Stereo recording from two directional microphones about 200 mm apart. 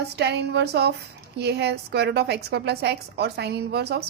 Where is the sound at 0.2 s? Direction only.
55° right (ahead or behind).